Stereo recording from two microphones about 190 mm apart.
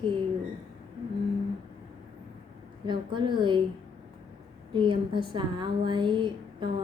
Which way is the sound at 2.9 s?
25° right (ahead or behind).